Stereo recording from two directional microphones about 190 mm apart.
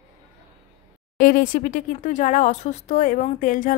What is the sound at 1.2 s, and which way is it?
Speech, 45° left (ahead or behind).